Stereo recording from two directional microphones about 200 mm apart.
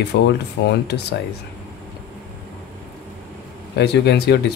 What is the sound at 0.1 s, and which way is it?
Speech, 55° left (ahead or behind).